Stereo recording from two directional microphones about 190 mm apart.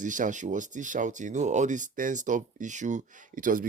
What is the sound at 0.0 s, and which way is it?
Speech, 40° right (ahead or behind).